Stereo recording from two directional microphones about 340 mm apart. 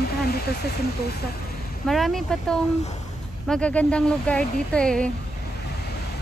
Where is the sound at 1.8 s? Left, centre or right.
Centre.